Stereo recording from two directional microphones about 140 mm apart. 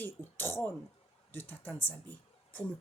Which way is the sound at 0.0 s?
15° left (ahead or behind).